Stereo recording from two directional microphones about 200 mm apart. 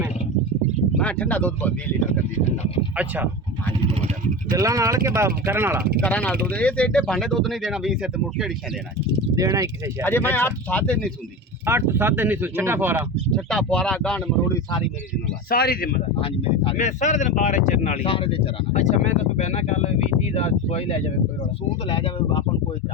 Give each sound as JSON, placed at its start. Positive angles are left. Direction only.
{"t": 0.9, "sound": "speech", "side_deg": 5}
{"t": 2.9, "sound": "speech", "side_deg": -5}
{"t": 4.5, "sound": "speech", "side_deg": -15}
{"t": 6.0, "sound": "speech", "side_deg": 5}
{"t": 9.3, "sound": "speech", "side_deg": -20}
{"t": 10.0, "sound": "speech", "side_deg": 10}
{"t": 11.6, "sound": "speech", "side_deg": -10}
{"t": 13.3, "sound": "speech", "side_deg": 5}
{"t": 15.4, "sound": "speech", "side_deg": 50}
{"t": 16.2, "sound": "speech", "side_deg": 30}